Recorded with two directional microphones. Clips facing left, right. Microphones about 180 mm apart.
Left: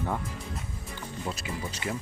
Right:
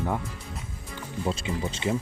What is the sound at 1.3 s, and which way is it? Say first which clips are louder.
Speech: right 7 dB; 25° right (ahead or behind).